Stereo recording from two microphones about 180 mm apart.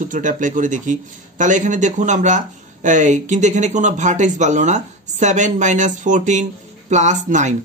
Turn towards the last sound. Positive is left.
turn(degrees=-40)  # may be behind; listen again after turning